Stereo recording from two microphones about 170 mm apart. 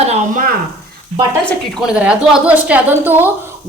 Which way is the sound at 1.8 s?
5° right (ahead or behind).